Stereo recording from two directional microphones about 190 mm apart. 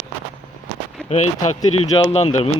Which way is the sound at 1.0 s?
5° left (ahead or behind).